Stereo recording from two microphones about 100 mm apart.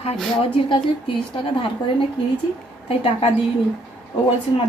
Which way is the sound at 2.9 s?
80° left.